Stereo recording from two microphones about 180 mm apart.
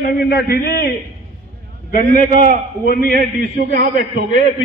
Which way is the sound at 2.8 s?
55° left (ahead or behind).